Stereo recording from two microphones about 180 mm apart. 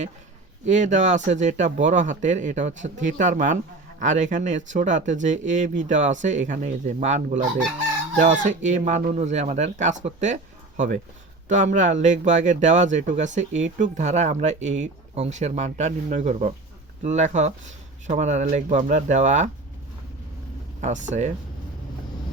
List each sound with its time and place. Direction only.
0.6 s a man's voice: 40° right (ahead or behind)
20.8 s a man's voice: 40° right (ahead or behind)